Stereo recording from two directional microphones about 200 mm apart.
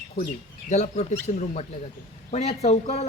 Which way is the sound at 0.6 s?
35° left (ahead or behind).